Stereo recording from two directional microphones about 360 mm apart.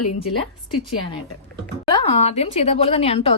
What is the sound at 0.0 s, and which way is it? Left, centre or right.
Speech, left.